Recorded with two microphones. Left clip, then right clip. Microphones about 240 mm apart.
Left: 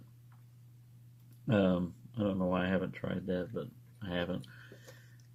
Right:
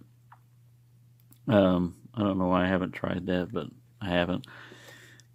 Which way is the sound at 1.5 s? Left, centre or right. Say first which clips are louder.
Right 8 dB; right.